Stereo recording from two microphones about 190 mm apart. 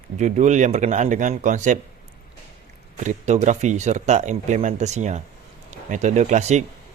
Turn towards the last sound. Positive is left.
turn(degrees=-40)  # may be behind; listen again after turning